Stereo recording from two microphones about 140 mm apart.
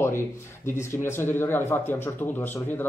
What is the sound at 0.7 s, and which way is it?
Speech, 20° left (ahead or behind).